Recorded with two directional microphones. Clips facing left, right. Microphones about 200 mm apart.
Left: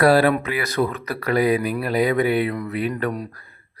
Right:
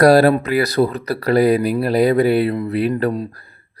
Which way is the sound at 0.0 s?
40° right (ahead or behind).